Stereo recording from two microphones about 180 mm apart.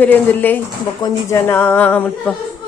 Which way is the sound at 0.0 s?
10° left (ahead or behind).